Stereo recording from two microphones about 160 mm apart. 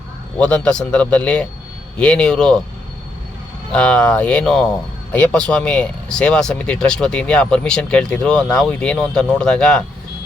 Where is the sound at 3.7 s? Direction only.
5° left (ahead or behind).